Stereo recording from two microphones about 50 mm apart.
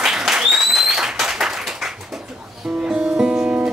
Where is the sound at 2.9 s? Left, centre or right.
Centre.